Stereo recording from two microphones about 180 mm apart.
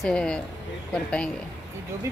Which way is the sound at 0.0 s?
5° left (ahead or behind).